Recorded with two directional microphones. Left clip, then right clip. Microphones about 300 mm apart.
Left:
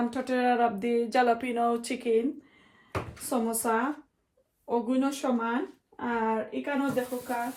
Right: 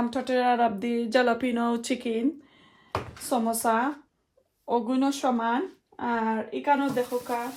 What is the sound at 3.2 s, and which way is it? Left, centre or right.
A woman's voice, right.